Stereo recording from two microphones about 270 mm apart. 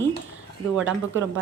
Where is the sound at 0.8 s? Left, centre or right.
Right.